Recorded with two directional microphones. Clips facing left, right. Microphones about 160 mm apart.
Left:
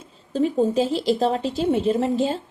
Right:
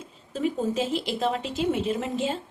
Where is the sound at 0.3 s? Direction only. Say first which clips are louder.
Left 6 dB; 35° left (ahead or behind).